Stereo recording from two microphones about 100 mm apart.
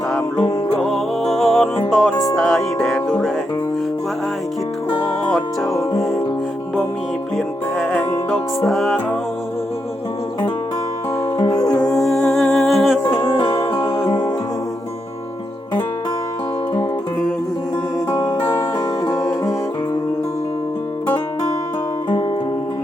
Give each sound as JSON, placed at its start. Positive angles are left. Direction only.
{"t": 0.8, "sound": "music", "side_deg": 0}
{"t": 2.3, "sound": "music", "side_deg": 5}
{"t": 5.3, "sound": "music", "side_deg": 0}
{"t": 7.3, "sound": "music", "side_deg": 0}
{"t": 11.8, "sound": "humming", "side_deg": 5}
{"t": 13.1, "sound": "music", "side_deg": 25}
{"t": 18.1, "sound": "music", "side_deg": 30}